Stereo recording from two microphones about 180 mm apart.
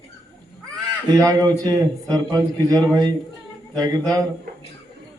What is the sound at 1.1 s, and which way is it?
A man's voice, 20° right (ahead or behind).